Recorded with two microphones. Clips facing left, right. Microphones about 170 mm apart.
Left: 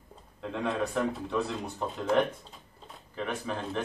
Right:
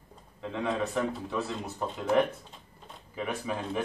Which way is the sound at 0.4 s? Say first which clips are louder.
Even; centre (ahead or behind).